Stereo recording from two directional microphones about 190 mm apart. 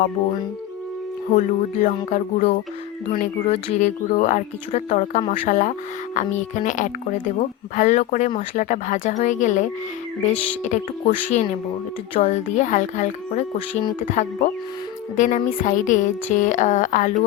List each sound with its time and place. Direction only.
1.3 s speech: 40° left (ahead or behind)
15.1 s speech: 40° left (ahead or behind)